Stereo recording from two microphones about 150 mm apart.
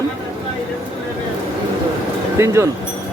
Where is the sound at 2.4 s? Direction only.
15° right (ahead or behind).